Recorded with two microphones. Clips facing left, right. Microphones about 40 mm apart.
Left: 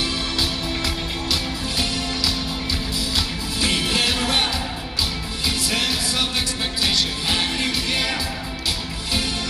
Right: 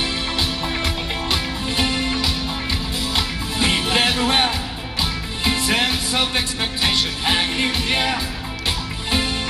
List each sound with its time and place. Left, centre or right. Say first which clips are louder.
0.0 s music: right 1 dB; right